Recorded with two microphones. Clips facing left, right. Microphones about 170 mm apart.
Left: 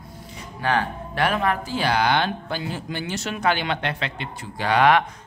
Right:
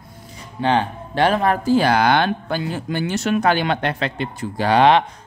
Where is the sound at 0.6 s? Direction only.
25° right (ahead or behind).